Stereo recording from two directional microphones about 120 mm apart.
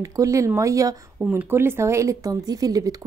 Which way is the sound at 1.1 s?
20° right (ahead or behind).